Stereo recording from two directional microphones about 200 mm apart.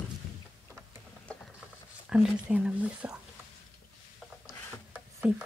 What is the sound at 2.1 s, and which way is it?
Speech, 5° right (ahead or behind).